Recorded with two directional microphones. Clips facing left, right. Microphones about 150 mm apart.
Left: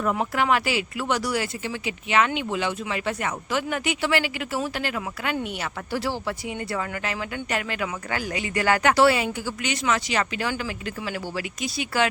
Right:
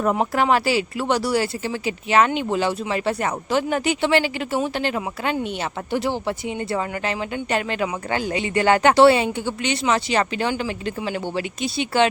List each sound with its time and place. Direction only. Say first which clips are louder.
0.0 s speech: right 4 dB; 35° right (ahead or behind)